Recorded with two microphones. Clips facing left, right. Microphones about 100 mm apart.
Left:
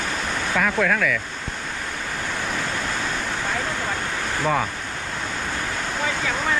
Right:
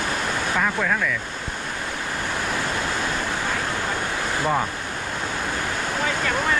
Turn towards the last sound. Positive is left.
turn(degrees=0)  # may be behind; listen again after turning